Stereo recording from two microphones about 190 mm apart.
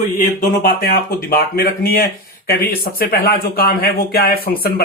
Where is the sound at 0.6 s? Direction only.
50° left (ahead or behind).